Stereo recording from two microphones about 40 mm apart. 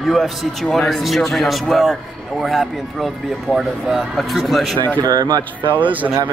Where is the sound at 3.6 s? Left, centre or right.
Centre.